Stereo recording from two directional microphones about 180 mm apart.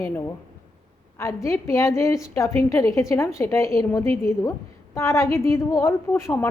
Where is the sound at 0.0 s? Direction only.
15° left (ahead or behind).